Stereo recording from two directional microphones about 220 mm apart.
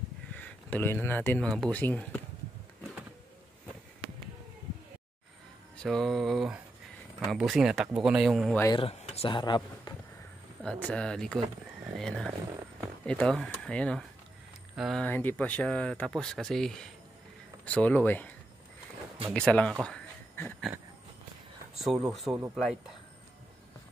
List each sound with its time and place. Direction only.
0.3 s speech: 5° left (ahead or behind)
5.8 s speech: centre (ahead or behind)
8.5 s speech: 15° left (ahead or behind)
8.8 s speech: 25° left (ahead or behind)
10.6 s speech: 5° left (ahead or behind)
19.3 s speech: 5° left (ahead or behind)
22.0 s speech: centre (ahead or behind)